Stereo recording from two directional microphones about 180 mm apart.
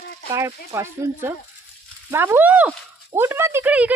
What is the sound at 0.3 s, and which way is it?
Speech, 15° right (ahead or behind).